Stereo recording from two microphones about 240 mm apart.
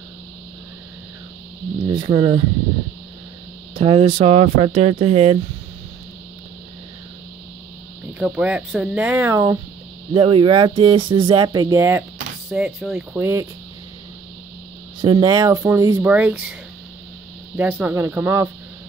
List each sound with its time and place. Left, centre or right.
1.8 s speech: centre
3.7 s speech: right
8.2 s speech: centre
15.0 s speech: centre
17.6 s speech: centre